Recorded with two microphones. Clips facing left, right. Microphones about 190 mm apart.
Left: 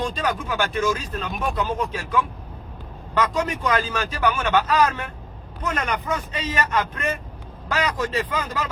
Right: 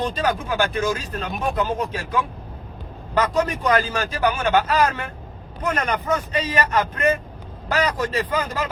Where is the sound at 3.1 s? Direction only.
35° right (ahead or behind).